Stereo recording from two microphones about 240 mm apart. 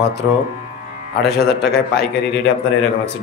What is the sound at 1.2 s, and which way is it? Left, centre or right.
A man's voice, left.